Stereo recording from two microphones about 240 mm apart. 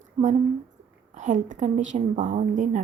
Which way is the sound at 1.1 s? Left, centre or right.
Right.